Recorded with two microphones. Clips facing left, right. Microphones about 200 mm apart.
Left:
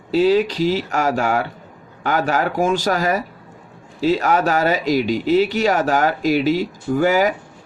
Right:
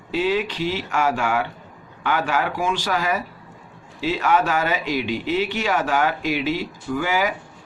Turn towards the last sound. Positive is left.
turn(degrees=45)  # may be behind; listen again after turning